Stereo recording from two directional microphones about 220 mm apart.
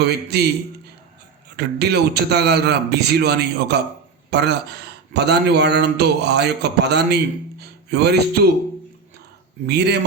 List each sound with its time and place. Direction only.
0.0 s a man's voice: 45° right (ahead or behind)
1.5 s a man's voice: 50° right (ahead or behind)
9.6 s a man's voice: 50° right (ahead or behind)